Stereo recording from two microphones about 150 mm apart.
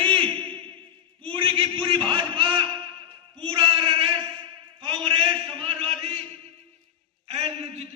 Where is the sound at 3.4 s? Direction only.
35° right (ahead or behind).